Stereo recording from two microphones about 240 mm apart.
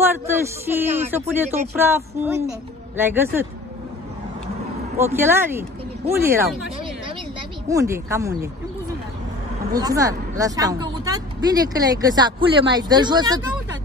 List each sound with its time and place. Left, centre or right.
0.0 s speech: centre
4.9 s speech: centre
7.6 s speech: centre
9.7 s speech: centre